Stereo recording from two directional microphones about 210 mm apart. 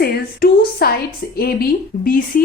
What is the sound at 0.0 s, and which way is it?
Speech, 50° left (ahead or behind).